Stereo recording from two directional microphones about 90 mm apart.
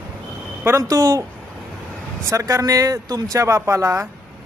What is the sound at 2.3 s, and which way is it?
Speech, 35° right (ahead or behind).